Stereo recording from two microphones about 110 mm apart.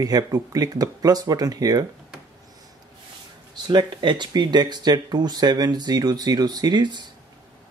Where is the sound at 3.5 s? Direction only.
45° right (ahead or behind).